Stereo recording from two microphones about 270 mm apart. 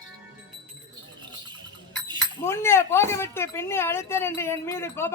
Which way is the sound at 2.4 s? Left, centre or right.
Centre.